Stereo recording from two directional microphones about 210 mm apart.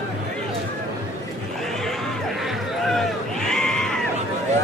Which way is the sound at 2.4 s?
Centre (ahead or behind).